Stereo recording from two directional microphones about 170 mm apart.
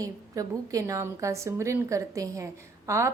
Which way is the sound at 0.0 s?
20° right (ahead or behind).